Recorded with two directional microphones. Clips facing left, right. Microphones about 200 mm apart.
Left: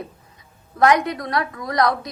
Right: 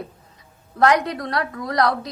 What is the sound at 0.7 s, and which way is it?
A woman's voice, 30° right (ahead or behind).